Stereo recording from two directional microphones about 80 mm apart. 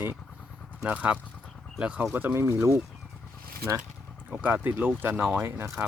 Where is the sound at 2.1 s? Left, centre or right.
Right.